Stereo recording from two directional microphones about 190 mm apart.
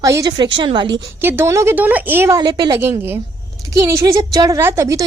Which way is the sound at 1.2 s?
15° right (ahead or behind).